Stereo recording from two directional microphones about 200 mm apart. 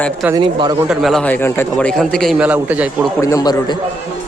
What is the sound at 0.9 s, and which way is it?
A man's voice, centre (ahead or behind).